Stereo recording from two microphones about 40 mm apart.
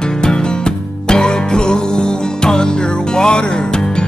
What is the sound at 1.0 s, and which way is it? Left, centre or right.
Music, centre.